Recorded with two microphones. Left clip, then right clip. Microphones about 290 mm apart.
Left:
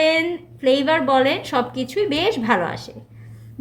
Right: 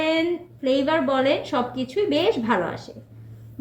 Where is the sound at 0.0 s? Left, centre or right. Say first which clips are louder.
Left 4 dB; left.